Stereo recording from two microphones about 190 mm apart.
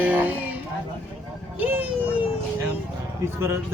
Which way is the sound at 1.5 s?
10° right (ahead or behind).